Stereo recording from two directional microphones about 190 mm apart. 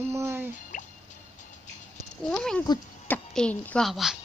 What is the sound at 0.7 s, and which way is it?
Drip, 45° left (ahead or behind).